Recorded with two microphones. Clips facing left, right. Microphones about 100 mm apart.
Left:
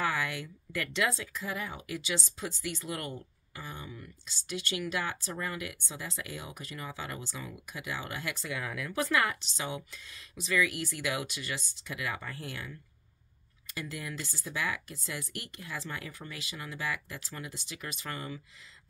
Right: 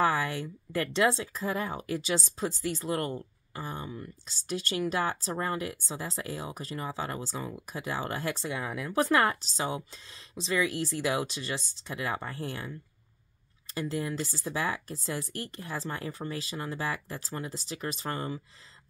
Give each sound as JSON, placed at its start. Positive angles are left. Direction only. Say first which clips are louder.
{"t": 0.0, "sound": "speech", "louder": "right 5 dB", "side_deg": -35}
{"t": 8.9, "sound": "speech", "louder": "right 5 dB", "side_deg": -40}
{"t": 13.7, "sound": "speech", "louder": "right 7 dB", "side_deg": -30}